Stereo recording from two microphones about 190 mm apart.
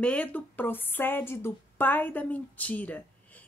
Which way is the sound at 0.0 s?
5° left (ahead or behind).